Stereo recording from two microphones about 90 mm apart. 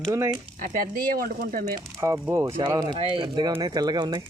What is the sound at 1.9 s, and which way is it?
Speech, 40° right (ahead or behind).